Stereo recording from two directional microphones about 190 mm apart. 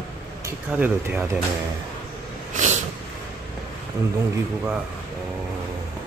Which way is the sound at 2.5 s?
40° right (ahead or behind).